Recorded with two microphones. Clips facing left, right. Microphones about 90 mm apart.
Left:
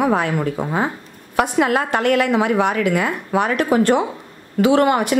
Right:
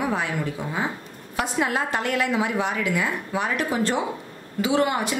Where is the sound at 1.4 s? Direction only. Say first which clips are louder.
Left 7 dB; 65° left (ahead or behind).